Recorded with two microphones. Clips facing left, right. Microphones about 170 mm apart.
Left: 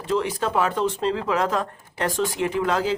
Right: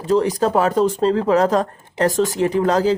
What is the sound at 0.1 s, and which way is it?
Speech, 40° right (ahead or behind).